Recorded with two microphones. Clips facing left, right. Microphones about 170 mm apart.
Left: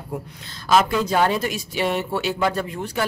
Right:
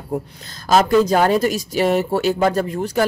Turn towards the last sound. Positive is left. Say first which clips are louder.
# right 6 dB
turn(degrees=-40)  # may be behind; listen again after turning